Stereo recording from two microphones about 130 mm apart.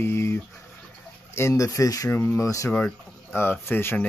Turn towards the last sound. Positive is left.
turn(degrees=15)  # may be behind; listen again after turning